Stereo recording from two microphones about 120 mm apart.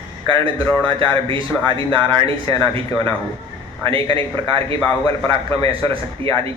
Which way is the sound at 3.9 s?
50° right (ahead or behind).